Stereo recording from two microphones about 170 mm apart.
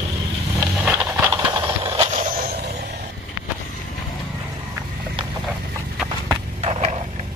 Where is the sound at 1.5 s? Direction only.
25° right (ahead or behind).